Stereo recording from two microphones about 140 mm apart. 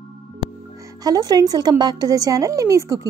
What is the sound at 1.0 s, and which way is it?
A woman's voice, 25° right (ahead or behind).